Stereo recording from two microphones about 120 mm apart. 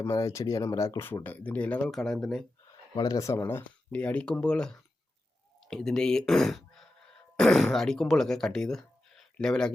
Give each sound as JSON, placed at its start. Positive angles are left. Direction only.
{"t": 0.0, "sound": "speech", "side_deg": 25}
{"t": 2.9, "sound": "speech", "side_deg": 35}